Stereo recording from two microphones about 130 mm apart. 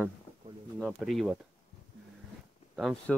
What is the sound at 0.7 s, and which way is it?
Speech, centre (ahead or behind).